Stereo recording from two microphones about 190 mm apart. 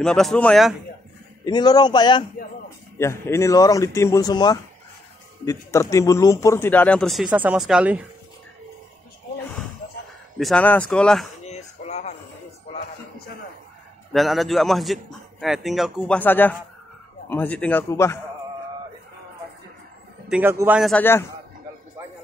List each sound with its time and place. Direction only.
0.0 s a man's voice: centre (ahead or behind)
1.4 s a man's voice: 20° left (ahead or behind); by 8.0 s 5° right (ahead or behind)
10.4 s a man's voice: 5° left (ahead or behind)
11.4 s a sound: 35° left (ahead or behind)
14.1 s a man's voice: centre (ahead or behind)
16.2 s speech: 10° left (ahead or behind)
20.2 s a man's voice: 10° right (ahead or behind)
20.9 s speech: 10° left (ahead or behind)